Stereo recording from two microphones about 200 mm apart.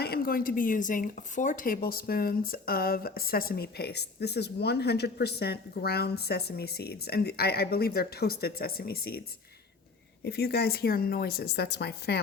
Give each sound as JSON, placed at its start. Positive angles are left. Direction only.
{"t": 0.0, "sound": "speech", "side_deg": 50}
{"t": 10.2, "sound": "speech", "side_deg": 55}